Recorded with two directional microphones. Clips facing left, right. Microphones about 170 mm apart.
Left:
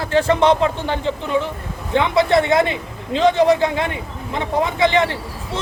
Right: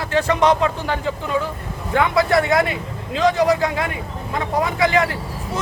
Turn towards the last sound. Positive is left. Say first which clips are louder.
# left 1 dB
turn(degrees=25)  # may be behind; listen again after turning